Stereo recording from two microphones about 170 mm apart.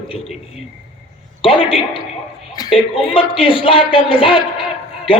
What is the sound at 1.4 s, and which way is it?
Speech, 30° left (ahead or behind).